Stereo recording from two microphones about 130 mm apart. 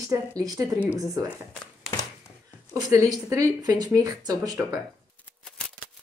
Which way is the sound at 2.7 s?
25° right (ahead or behind).